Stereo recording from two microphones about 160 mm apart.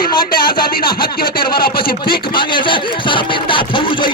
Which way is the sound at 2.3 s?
30° left (ahead or behind).